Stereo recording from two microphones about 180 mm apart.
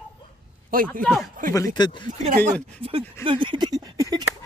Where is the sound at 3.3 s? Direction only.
25° right (ahead or behind).